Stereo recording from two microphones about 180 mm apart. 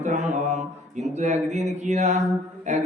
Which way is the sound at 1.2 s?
40° right (ahead or behind).